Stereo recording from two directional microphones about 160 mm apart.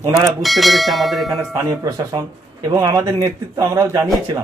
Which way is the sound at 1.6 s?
20° right (ahead or behind).